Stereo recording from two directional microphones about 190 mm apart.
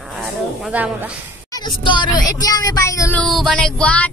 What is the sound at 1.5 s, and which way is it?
Speech, 25° left (ahead or behind).